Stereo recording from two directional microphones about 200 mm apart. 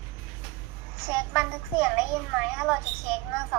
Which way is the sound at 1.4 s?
Centre (ahead or behind).